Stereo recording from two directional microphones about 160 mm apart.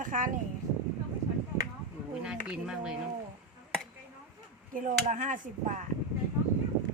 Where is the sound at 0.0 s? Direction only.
55° right (ahead or behind).